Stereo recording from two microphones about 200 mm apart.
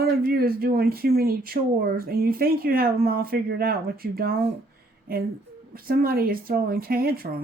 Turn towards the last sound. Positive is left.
turn(degrees=-45)  # may be behind; listen again after turning